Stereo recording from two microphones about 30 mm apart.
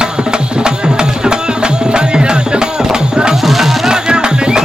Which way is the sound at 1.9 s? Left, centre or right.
Right.